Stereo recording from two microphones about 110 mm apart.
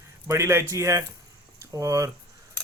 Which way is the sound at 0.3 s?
25° right (ahead or behind).